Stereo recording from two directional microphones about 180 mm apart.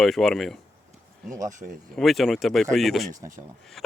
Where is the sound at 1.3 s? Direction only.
20° right (ahead or behind).